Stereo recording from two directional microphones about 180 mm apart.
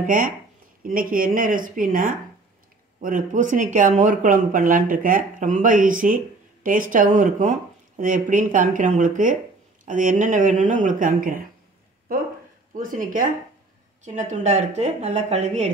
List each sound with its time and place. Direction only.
0.0 s a woman's voice: 50° right (ahead or behind)